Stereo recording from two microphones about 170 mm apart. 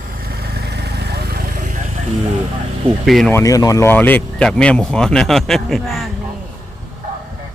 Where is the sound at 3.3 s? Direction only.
20° left (ahead or behind); by 6.1 s centre (ahead or behind).